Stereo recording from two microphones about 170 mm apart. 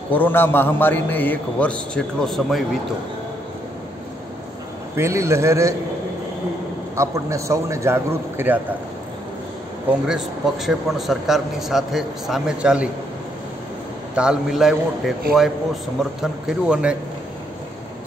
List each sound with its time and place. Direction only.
0.1 s a man's voice: 10° left (ahead or behind)
4.9 s a man's voice: 15° right (ahead or behind)
7.0 s a man's voice: 15° right (ahead or behind)
10.0 s a man's voice: 5° right (ahead or behind)
14.1 s a man's voice: 5° right (ahead or behind)